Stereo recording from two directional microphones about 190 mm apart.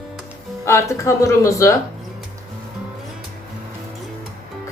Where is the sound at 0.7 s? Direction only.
15° left (ahead or behind).